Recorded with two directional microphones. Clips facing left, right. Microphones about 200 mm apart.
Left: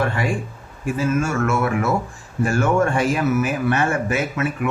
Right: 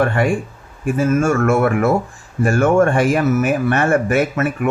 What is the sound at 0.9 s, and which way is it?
Speech, 55° right (ahead or behind).